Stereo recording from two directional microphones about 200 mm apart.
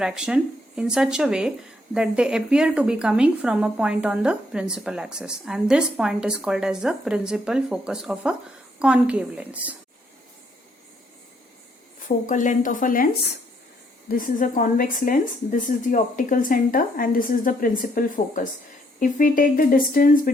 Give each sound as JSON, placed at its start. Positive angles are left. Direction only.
{"t": 0.0, "sound": "speech", "side_deg": -5}
{"t": 11.9, "sound": "a woman's voice", "side_deg": 40}
{"t": 14.1, "sound": "speech", "side_deg": 45}